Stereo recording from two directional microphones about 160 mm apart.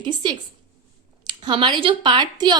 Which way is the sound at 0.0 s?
30° right (ahead or behind).